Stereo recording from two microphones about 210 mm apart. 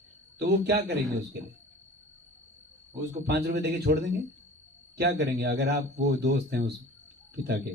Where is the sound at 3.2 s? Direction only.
50° right (ahead or behind).